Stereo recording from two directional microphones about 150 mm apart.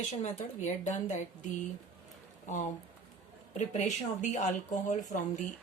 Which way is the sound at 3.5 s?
55° left (ahead or behind).